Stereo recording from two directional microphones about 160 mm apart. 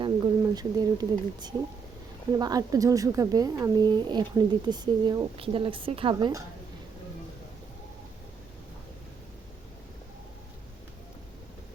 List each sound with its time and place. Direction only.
0.0 s speech: 25° right (ahead or behind)